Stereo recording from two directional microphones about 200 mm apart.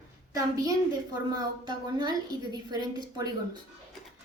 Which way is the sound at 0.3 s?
20° right (ahead or behind).